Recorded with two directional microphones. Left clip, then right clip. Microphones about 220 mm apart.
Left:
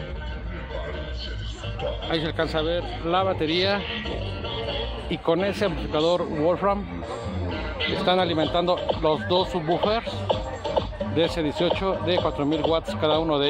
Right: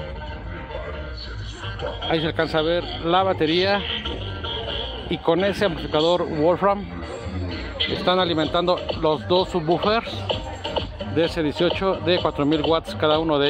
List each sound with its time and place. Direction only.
2.0 s speech: 20° right (ahead or behind)
5.1 s speech: 10° right (ahead or behind)
8.0 s speech: 10° right (ahead or behind)
10.2 s music: 50° right (ahead or behind)
11.1 s speech: 10° right (ahead or behind)